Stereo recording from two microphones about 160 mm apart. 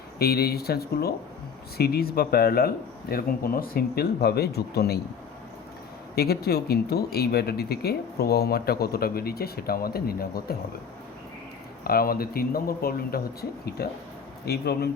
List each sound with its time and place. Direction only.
0.2 s speech: 75° left (ahead or behind)
6.1 s speech: 80° left
11.8 s speech: 70° left (ahead or behind)
13.8 s speech: 85° left